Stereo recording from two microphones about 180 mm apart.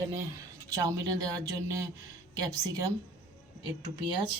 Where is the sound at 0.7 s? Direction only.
20° right (ahead or behind).